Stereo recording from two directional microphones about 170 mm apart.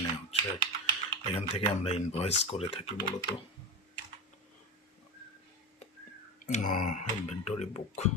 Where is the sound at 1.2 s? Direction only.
30° left (ahead or behind).